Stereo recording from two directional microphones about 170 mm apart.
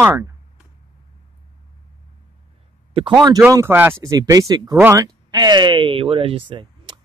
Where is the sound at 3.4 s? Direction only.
15° right (ahead or behind); by 6.4 s 30° right (ahead or behind).